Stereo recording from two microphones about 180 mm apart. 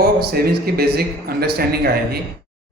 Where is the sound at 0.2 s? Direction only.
60° right (ahead or behind).